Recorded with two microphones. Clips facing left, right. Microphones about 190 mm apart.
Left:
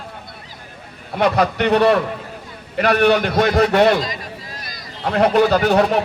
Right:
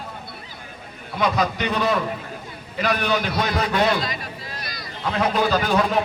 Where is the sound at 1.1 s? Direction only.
65° left (ahead or behind).